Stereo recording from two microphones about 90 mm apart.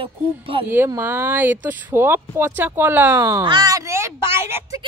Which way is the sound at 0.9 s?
25° right (ahead or behind).